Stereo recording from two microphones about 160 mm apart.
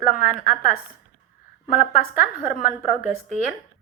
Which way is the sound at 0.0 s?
55° left (ahead or behind).